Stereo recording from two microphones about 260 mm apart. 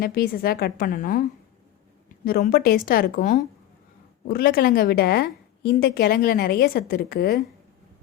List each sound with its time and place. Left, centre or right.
0.0 s a woman's voice: left
2.2 s a woman's voice: left